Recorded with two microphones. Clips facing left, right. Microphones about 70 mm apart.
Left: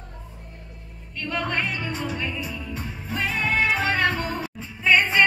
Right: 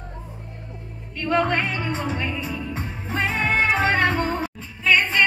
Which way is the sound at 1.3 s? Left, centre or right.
Right.